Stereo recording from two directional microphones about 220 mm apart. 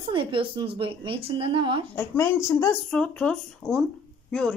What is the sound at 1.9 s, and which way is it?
Speech, 10° left (ahead or behind).